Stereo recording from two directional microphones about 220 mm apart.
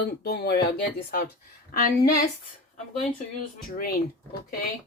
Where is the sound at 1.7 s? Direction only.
45° left (ahead or behind).